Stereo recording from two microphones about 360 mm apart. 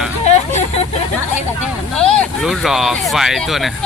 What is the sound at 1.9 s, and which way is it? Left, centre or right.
Speech, centre.